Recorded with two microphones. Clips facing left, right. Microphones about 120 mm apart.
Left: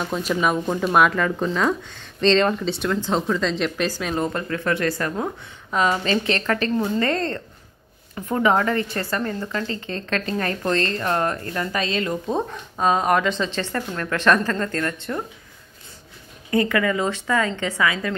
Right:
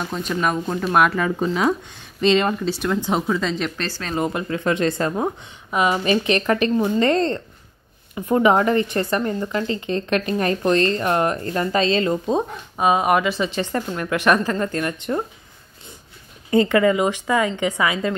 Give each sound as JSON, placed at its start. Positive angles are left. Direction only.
{"t": 0.1, "sound": "speech", "side_deg": 0}
{"t": 4.1, "sound": "a woman's voice", "side_deg": -10}
{"t": 5.7, "sound": "speech", "side_deg": -10}
{"t": 16.4, "sound": "a woman's voice", "side_deg": -25}